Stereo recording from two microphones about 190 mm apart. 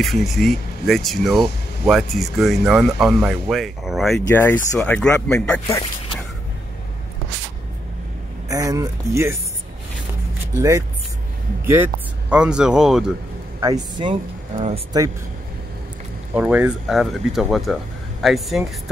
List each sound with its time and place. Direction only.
0.0 s speech: centre (ahead or behind)
4.4 s speech: 10° left (ahead or behind)
8.5 s speech: 20° right (ahead or behind)
11.6 s speech: 10° right (ahead or behind)
13.6 s speech: 20° right (ahead or behind)
16.3 s speech: 5° right (ahead or behind)